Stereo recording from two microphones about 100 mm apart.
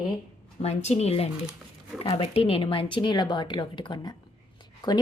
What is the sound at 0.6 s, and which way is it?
Speech, 90° left.